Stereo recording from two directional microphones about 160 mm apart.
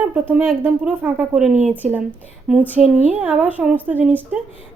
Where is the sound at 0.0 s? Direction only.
10° right (ahead or behind).